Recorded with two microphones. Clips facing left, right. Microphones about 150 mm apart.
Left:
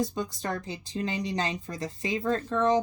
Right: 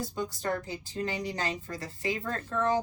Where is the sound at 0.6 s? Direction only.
20° left (ahead or behind).